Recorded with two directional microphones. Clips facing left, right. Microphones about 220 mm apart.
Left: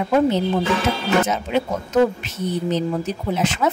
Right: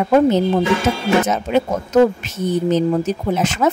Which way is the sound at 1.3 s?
45° right (ahead or behind).